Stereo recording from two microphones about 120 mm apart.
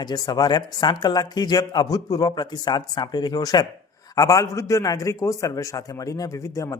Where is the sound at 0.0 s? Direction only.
35° left (ahead or behind).